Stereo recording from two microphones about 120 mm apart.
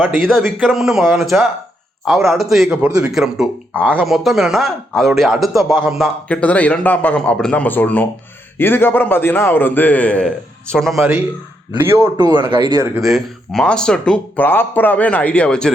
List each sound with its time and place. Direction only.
0.2 s speech: centre (ahead or behind)
6.2 s speech: 10° left (ahead or behind)
11.8 s a man's voice: 20° right (ahead or behind)
12.1 s speech: 35° right (ahead or behind)
13.0 s speech: centre (ahead or behind)